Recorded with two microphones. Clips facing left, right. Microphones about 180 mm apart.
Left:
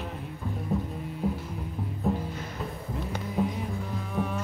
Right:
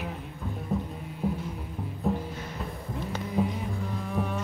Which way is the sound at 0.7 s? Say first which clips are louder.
Left 1 dB; centre (ahead or behind).